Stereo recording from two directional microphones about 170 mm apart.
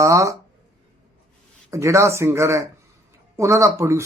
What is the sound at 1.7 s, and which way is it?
A man's voice, 15° right (ahead or behind).